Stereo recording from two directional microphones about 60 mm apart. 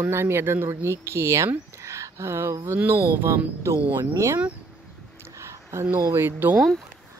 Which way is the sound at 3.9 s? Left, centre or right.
Right.